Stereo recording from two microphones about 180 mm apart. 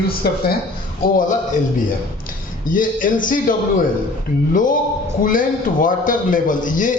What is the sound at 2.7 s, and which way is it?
Speech, 50° left (ahead or behind).